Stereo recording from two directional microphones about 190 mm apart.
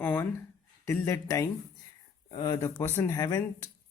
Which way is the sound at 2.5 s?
10° left (ahead or behind).